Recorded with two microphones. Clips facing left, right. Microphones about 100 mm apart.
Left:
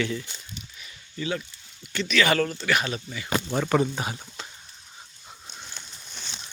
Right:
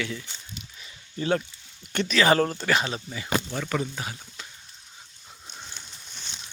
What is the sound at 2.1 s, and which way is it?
Speech, 35° right (ahead or behind).